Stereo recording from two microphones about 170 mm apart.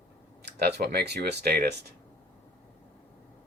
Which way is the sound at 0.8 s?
65° right (ahead or behind).